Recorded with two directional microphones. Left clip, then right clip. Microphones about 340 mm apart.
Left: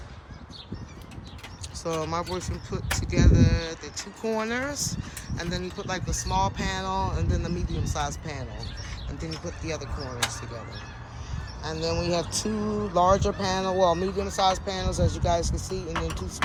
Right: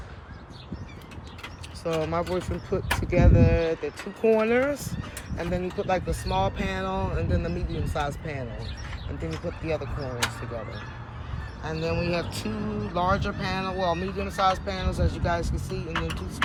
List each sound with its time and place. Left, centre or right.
1.8 s speech: centre
11.7 s speech: centre
15.9 s a sound: left